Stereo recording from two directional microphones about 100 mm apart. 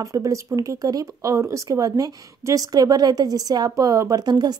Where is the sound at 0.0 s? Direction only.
35° right (ahead or behind).